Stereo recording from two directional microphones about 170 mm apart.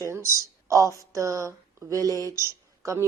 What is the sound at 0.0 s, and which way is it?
A woman's voice, 15° right (ahead or behind).